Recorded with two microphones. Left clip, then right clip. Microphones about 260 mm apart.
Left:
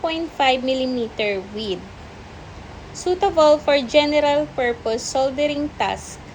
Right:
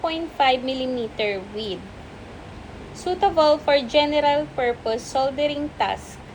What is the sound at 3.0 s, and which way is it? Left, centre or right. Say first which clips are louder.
A woman's voice: left 2 dB; left.